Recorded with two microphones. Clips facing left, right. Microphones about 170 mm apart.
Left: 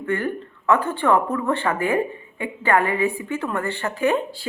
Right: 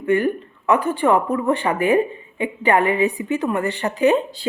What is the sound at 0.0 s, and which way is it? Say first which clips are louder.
A woman's voice: right 6 dB; 15° right (ahead or behind).